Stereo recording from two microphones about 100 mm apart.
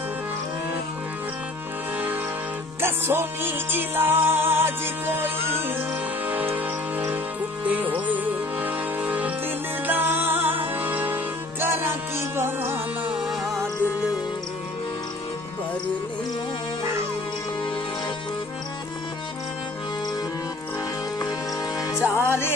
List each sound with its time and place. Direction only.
2.8 s music: 25° right (ahead or behind)
7.6 s music: 15° right (ahead or behind)
13.1 s music: 5° right (ahead or behind)
21.7 s music: 35° left (ahead or behind)
22.1 s music: 25° right (ahead or behind)